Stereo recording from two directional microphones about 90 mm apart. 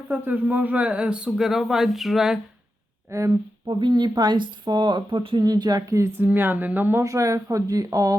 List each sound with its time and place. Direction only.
0.1 s speech: 15° right (ahead or behind)
3.1 s speech: 35° right (ahead or behind)
3.7 s speech: 55° right (ahead or behind)
5.4 s speech: 50° right (ahead or behind)
6.0 s speech: 30° right (ahead or behind)
7.0 s speech: 35° right (ahead or behind)